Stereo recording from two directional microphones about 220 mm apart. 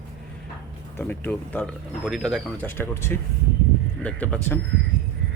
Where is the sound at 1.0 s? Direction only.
10° left (ahead or behind).